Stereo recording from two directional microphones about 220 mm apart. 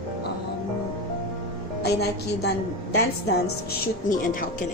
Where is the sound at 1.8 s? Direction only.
45° left (ahead or behind).